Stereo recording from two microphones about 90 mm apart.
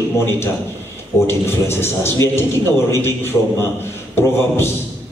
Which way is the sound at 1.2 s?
30° left (ahead or behind).